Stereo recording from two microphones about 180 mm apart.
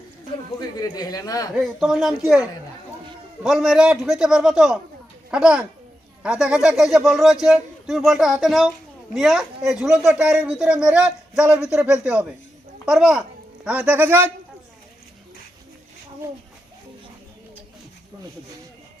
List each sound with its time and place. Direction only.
0.8 s speech: 20° left (ahead or behind)
1.5 s a man's voice: centre (ahead or behind)